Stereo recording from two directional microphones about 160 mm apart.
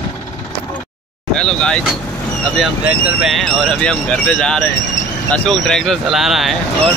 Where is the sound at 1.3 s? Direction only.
5° left (ahead or behind).